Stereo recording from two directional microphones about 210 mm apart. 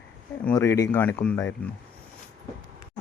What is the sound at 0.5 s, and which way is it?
Speech, 15° left (ahead or behind).